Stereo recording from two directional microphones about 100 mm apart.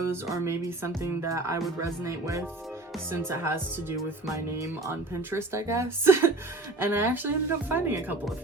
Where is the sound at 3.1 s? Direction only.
25° right (ahead or behind).